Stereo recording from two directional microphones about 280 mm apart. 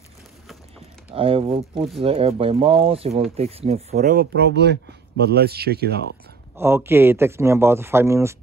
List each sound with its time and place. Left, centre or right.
1.1 s speech: centre
3.9 s speech: right
6.5 s a man's voice: centre